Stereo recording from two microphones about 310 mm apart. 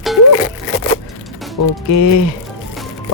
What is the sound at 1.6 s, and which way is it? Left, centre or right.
Speech, left.